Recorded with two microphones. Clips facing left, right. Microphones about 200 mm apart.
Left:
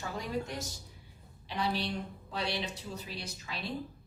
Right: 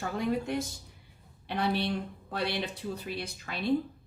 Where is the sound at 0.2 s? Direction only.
60° right (ahead or behind).